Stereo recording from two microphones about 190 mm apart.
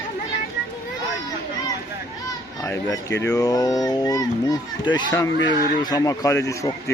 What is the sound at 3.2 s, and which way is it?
A child's voice, 20° left (ahead or behind).